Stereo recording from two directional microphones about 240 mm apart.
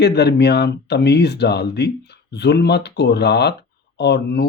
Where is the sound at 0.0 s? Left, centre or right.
Left.